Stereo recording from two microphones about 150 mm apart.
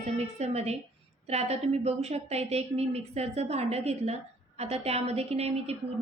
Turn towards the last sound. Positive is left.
turn(degrees=-45)  # may be behind; listen again after turning